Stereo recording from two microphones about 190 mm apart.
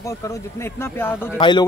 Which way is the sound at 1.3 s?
25° left (ahead or behind).